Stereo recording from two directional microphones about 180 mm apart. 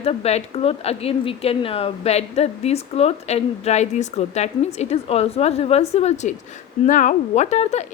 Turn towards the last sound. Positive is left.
turn(degrees=40)  # may be behind; listen again after turning